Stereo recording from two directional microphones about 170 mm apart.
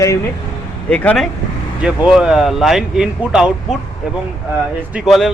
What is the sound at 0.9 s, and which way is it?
Speech, 10° left (ahead or behind).